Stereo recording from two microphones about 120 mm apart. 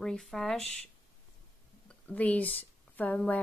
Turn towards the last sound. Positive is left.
turn(degrees=15)  # may be behind; listen again after turning